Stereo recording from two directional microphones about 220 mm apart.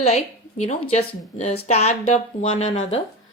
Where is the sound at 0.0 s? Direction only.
30° left (ahead or behind).